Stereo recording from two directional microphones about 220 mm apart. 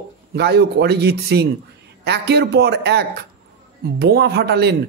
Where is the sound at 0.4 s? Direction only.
50° right (ahead or behind).